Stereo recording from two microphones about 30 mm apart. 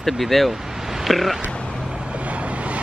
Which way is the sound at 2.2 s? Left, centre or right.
Right.